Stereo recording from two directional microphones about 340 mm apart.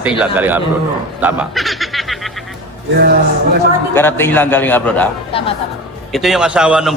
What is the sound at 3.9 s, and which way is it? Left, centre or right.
A man's voice, centre.